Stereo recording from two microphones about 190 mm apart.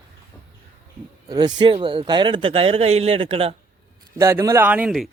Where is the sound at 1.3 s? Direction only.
20° right (ahead or behind).